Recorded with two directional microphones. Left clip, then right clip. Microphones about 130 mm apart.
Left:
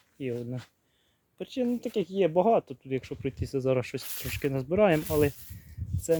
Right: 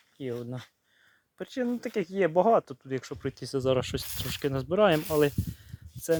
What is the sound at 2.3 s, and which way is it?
Speech, 10° left (ahead or behind).